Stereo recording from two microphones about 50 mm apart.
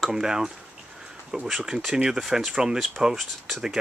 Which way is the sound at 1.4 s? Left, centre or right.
Centre.